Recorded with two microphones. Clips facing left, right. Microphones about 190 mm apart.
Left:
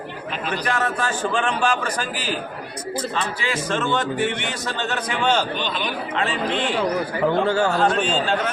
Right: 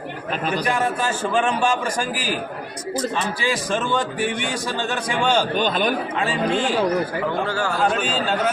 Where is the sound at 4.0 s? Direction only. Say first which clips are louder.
Left 1 dB; 15° right (ahead or behind).